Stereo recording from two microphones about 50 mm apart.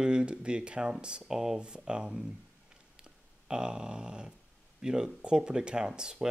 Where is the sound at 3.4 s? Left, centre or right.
Centre.